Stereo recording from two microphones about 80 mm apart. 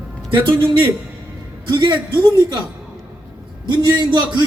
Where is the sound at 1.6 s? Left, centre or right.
Right.